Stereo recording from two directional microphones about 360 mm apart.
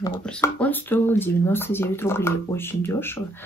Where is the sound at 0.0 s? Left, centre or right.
Centre.